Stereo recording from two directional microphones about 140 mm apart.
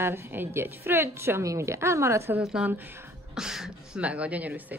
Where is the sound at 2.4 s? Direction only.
5° right (ahead or behind).